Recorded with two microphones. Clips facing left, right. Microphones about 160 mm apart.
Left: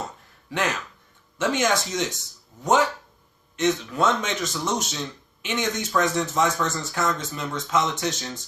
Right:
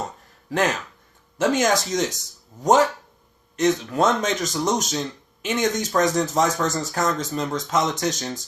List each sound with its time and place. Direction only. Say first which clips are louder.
1.4 s speech: right 3 dB; 40° right (ahead or behind)